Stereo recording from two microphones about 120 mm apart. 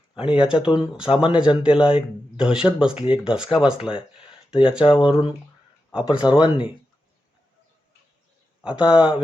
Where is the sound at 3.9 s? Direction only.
45° left (ahead or behind).